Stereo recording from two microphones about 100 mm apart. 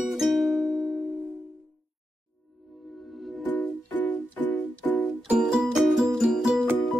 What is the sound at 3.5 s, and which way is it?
Music, 15° left (ahead or behind).